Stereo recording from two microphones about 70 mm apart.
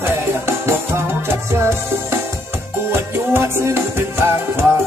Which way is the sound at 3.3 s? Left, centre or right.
Right.